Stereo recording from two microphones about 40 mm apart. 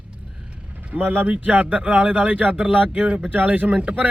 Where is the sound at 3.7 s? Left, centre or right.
Right.